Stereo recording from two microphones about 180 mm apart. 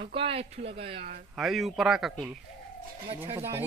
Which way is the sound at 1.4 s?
Centre (ahead or behind).